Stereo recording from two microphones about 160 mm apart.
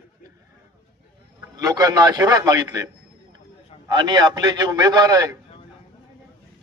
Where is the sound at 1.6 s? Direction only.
20° right (ahead or behind).